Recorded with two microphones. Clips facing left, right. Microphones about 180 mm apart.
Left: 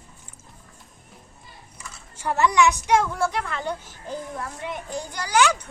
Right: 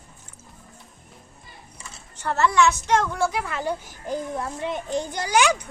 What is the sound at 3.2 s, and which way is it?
Speech, 5° right (ahead or behind).